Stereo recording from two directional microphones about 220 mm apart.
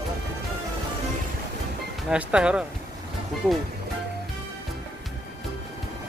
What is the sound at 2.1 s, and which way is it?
Speech, 5° right (ahead or behind).